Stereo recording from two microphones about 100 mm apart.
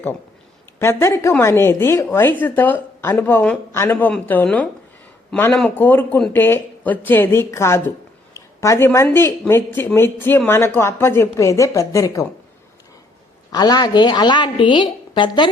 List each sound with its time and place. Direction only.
0.8 s a man's voice: 25° left (ahead or behind)
5.5 s a man's voice: 15° left (ahead or behind); by 12.2 s 35° left (ahead or behind)
13.5 s a woman's voice: 45° left (ahead or behind)